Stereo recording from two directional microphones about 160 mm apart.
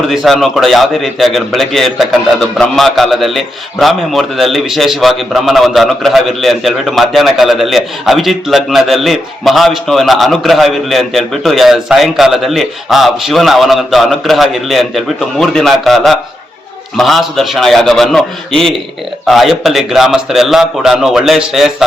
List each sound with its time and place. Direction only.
0.1 s a man's voice: centre (ahead or behind)